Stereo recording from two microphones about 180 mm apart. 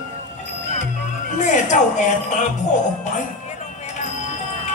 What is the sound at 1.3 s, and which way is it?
Speech, 45° left (ahead or behind).